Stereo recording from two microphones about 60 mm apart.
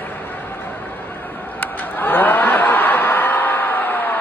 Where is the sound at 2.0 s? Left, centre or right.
Left.